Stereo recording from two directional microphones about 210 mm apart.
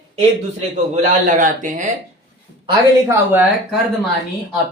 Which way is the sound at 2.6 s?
15° right (ahead or behind).